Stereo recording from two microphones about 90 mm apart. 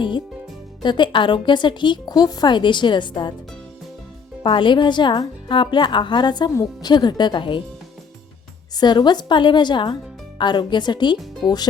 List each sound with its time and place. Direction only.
0.8 s speech: 60° left (ahead or behind)
4.4 s speech: 65° left (ahead or behind)
8.7 s speech: 50° left (ahead or behind)